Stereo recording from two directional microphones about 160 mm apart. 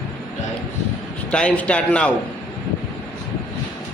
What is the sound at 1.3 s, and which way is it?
Speech, 5° left (ahead or behind).